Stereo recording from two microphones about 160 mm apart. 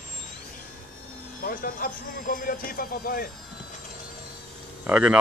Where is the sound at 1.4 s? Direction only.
65° left (ahead or behind).